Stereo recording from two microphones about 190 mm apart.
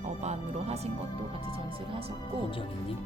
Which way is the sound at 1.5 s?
30° right (ahead or behind).